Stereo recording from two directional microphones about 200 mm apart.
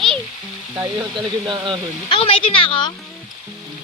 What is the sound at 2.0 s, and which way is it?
Speech, 25° left (ahead or behind).